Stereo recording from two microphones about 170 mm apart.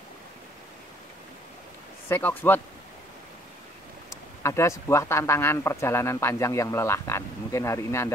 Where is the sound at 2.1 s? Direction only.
10° left (ahead or behind).